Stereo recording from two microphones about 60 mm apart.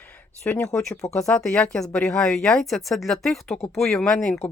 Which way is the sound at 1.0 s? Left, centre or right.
Centre.